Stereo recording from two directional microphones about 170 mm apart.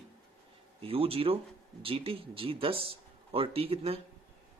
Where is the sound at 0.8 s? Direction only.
35° right (ahead or behind).